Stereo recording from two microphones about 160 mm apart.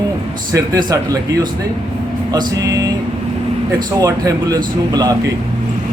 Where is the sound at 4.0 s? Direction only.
20° right (ahead or behind).